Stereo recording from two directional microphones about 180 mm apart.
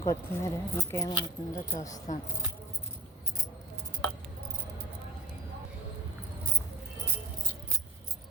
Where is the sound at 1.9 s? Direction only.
45° left (ahead or behind).